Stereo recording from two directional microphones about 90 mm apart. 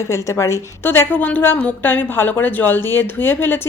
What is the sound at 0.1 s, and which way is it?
Speech, 35° left (ahead or behind).